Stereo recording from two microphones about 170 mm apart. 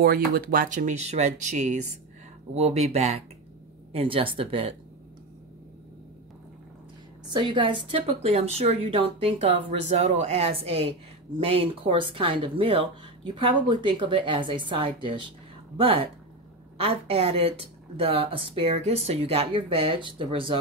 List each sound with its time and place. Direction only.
0.0 s speech: 60° right (ahead or behind); by 4.6 s 30° right (ahead or behind)
7.2 s a woman's voice: 30° right (ahead or behind)